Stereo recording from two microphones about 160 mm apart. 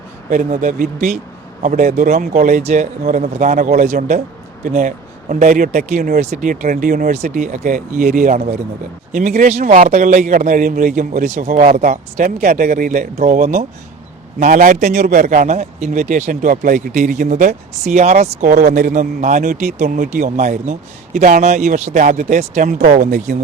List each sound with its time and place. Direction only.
0.3 s a man's voice: 55° right (ahead or behind)
7.1 s a man's voice: 45° right (ahead or behind)